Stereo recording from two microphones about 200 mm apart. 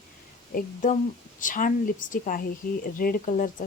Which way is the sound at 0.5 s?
40° left (ahead or behind).